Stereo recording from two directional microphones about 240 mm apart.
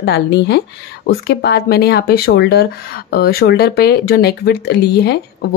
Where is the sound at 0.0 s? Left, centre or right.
Left.